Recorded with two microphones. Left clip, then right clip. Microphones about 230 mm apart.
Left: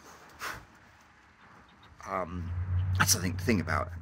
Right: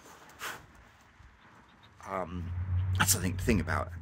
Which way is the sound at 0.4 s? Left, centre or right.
Centre.